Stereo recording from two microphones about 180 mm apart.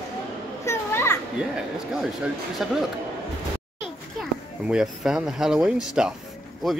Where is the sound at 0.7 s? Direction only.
15° left (ahead or behind).